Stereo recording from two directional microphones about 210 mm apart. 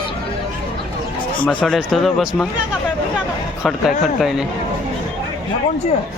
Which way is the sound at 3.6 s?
Centre (ahead or behind).